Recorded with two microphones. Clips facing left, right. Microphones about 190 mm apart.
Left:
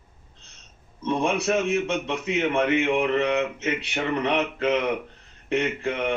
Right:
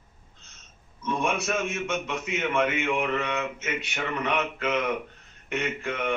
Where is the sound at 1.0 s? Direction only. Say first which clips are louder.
Left 4 dB; 35° left (ahead or behind).